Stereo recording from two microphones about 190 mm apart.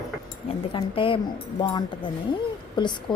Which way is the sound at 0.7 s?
25° left (ahead or behind).